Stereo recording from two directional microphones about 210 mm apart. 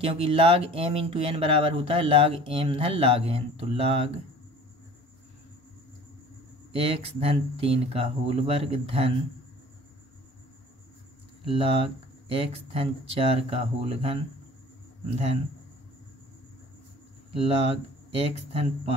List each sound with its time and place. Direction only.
0.0 s speech: 25° right (ahead or behind)
6.7 s speech: 25° right (ahead or behind)
11.4 s speech: 25° right (ahead or behind)
17.3 s speech: 25° right (ahead or behind)